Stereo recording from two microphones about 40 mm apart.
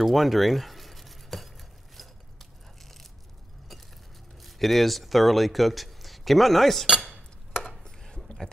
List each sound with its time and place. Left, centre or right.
0.0 s a sound: centre
2.0 s biting: centre
4.4 s speech: centre
7.5 s chopping: centre
7.8 s chopping: centre